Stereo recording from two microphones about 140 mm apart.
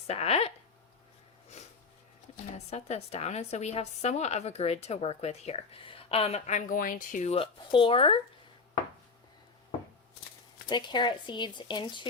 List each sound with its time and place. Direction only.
0.1 s a woman's voice: 45° left (ahead or behind)
2.6 s a woman's voice: 50° left (ahead or behind); by 7.2 s 80° left
7.2 s speech: 45° left (ahead or behind)
10.7 s speech: 35° left (ahead or behind)